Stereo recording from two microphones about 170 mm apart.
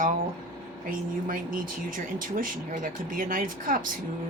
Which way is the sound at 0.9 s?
55° right (ahead or behind).